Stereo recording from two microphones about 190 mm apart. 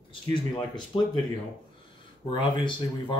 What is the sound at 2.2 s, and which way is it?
Speech, 25° left (ahead or behind).